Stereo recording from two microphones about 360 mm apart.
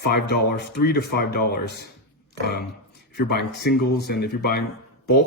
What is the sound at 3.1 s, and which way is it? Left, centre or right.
Speech, left.